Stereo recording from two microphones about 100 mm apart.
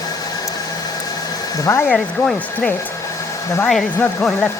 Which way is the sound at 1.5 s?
30° left (ahead or behind).